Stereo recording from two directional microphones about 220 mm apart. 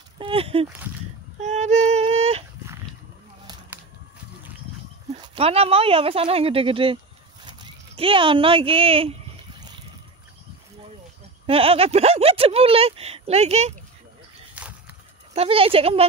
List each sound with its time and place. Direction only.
0.2 s speech: 25° right (ahead or behind)
1.4 s a sound: 30° right (ahead or behind)
5.2 s speech: 25° right (ahead or behind)
11.4 s speech: 25° right (ahead or behind)
15.3 s speech: 25° right (ahead or behind)